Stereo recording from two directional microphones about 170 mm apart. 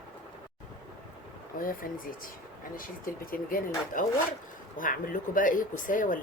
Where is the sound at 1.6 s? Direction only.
55° left (ahead or behind).